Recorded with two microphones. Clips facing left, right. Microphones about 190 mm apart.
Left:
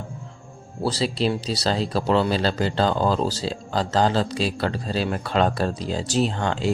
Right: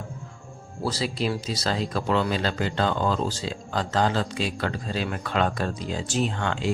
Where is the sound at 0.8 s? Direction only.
30° left (ahead or behind).